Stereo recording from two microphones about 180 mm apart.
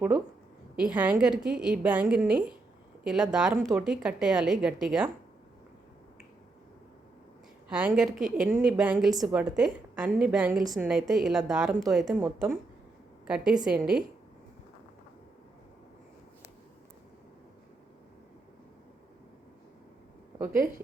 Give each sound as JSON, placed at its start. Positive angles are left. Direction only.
{"t": 0.8, "sound": "a woman's voice", "side_deg": -5}
{"t": 7.7, "sound": "a woman's voice", "side_deg": -5}
{"t": 10.6, "sound": "a woman's voice", "side_deg": -20}
{"t": 10.8, "sound": "a woman's voice", "side_deg": 0}
{"t": 20.4, "sound": "a woman's voice", "side_deg": -15}